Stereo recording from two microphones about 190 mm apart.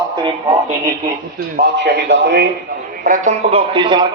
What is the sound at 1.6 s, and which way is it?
Speech, 60° right (ahead or behind).